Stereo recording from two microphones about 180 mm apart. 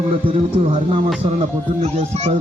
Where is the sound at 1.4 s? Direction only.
40° right (ahead or behind).